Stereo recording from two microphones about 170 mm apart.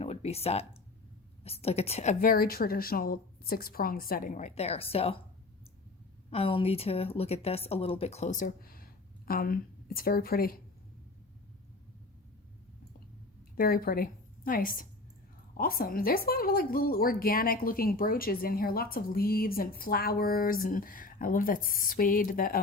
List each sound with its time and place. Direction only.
0.0 s speech: 35° left (ahead or behind)
1.6 s speech: 35° left (ahead or behind)
2.3 s a woman's voice: 60° left (ahead or behind); by 5.2 s 35° left (ahead or behind)
6.3 s speech: 35° left (ahead or behind); by 10.5 s 60° left (ahead or behind)
13.6 s a woman's voice: 60° left (ahead or behind)